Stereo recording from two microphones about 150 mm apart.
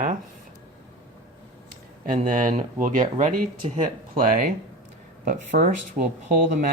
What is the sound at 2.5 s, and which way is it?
Speech, 55° right (ahead or behind).